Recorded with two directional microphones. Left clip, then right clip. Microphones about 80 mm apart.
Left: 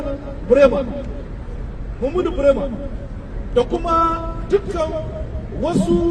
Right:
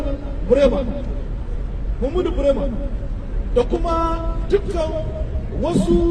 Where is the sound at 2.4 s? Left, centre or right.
Left.